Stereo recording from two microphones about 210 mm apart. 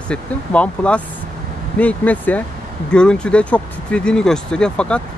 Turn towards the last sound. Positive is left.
turn(degrees=5)  # may be behind; listen again after turning